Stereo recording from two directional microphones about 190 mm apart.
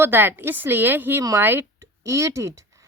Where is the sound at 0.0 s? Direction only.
10° right (ahead or behind).